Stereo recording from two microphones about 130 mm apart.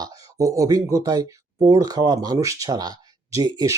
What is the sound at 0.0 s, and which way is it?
Speech, 25° right (ahead or behind).